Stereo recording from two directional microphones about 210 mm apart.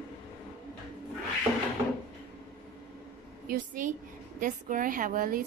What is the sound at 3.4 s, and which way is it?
A woman's voice, 40° right (ahead or behind).